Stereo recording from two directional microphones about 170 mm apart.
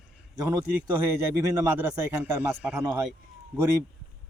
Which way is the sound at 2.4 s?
15° right (ahead or behind).